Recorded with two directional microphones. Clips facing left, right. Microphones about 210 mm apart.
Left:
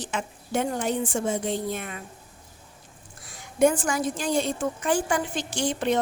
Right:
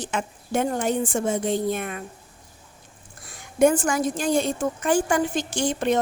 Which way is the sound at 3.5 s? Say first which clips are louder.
Right 2 dB; 50° right (ahead or behind).